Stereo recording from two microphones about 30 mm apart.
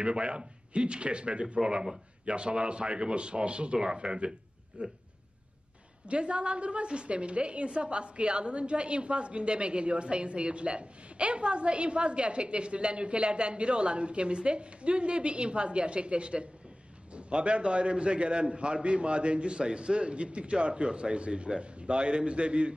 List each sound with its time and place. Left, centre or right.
0.0 s a woman's voice: right
1.6 s a man's voice: right
4.8 s speech: right
6.0 s a woman's voice: right